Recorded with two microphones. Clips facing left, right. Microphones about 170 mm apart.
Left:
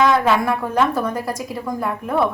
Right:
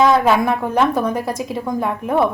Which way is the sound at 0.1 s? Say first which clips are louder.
Right 2 dB; 25° right (ahead or behind).